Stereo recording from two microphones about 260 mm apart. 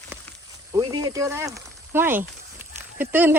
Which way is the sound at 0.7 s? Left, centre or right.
Centre.